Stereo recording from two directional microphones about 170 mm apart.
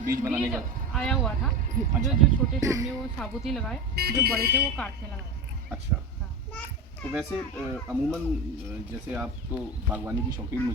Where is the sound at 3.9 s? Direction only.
70° right (ahead or behind).